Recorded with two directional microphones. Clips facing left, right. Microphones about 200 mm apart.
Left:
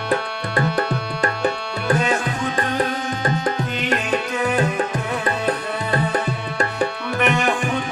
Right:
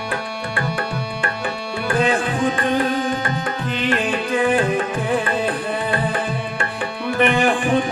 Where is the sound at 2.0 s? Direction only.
30° right (ahead or behind).